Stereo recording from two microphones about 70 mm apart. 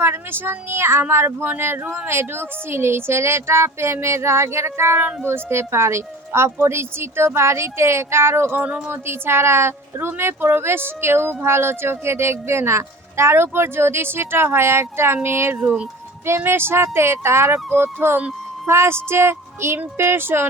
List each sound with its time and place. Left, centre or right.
0.0 s a child's voice: right
2.0 s a child's voice: right
8.6 s a woman's voice: centre
8.9 s a child's voice: right
15.6 s a woman's voice: centre
16.2 s a child's voice: right
18.2 s a sound: centre
18.7 s a child's voice: right